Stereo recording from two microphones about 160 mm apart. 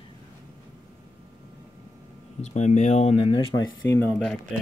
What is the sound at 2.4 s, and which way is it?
Speech, 45° left (ahead or behind).